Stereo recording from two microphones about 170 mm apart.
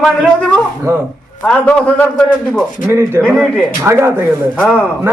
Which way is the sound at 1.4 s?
5° left (ahead or behind).